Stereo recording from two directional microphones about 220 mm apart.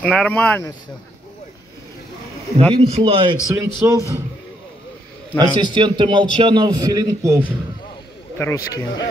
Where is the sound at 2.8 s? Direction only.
25° right (ahead or behind).